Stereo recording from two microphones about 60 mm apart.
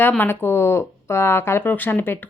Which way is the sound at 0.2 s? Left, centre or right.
Left.